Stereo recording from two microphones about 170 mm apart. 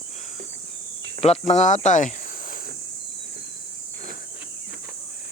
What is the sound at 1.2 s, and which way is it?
Speech, 40° left (ahead or behind).